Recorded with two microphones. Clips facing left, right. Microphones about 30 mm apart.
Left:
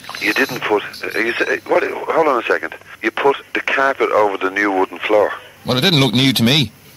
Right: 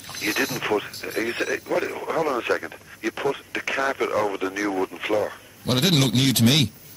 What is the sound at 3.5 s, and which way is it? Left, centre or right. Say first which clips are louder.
Speech: left 9 dB; left.